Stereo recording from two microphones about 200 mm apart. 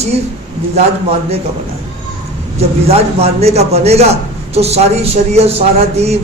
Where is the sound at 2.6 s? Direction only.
30° right (ahead or behind).